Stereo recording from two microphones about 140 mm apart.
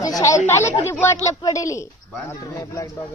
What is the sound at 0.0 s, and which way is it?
Speech, 25° left (ahead or behind).